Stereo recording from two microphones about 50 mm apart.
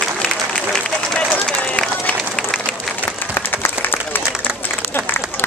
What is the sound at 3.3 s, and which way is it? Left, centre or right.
Applause, left.